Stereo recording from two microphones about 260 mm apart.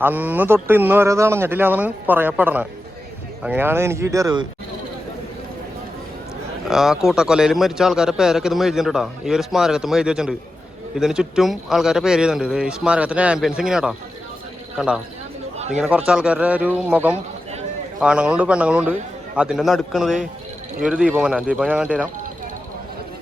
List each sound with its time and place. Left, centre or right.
0.0 s speech: centre
6.7 s a man's voice: centre
15.5 s a sound: right
15.8 s a man's voice: centre